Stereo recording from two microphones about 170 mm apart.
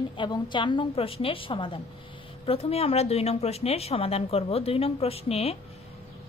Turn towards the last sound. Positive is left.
turn(degrees=35)  # may be behind; listen again after turning